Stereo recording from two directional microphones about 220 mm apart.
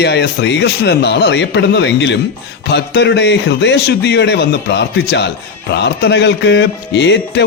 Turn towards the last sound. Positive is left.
turn(degrees=50)  # may be behind; listen again after turning